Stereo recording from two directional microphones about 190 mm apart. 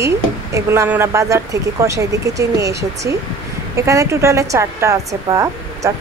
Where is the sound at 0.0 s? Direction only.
15° right (ahead or behind).